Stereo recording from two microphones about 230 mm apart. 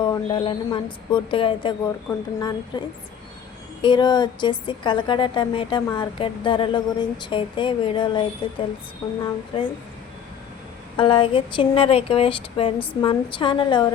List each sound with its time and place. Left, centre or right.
0.0 s a woman's voice: centre
10.9 s a woman's voice: left